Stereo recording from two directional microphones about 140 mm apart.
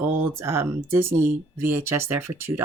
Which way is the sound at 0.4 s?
20° right (ahead or behind).